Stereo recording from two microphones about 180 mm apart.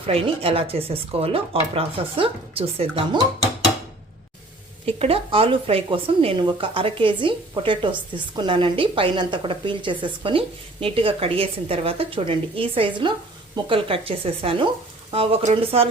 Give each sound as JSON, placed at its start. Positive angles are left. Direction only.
{"t": 0.0, "sound": "speech", "side_deg": -30}
{"t": 4.9, "sound": "a woman's voice", "side_deg": -35}